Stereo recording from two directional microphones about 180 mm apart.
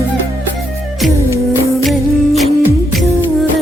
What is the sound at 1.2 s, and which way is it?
Music, 15° left (ahead or behind).